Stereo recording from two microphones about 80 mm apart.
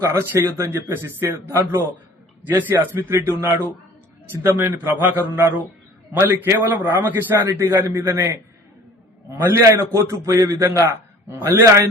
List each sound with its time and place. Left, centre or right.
0.0 s a man's voice: right